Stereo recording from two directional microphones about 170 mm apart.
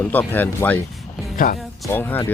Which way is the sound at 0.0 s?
10° left (ahead or behind).